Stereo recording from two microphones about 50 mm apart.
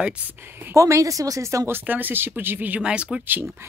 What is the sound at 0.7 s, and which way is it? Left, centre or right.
Speech, right.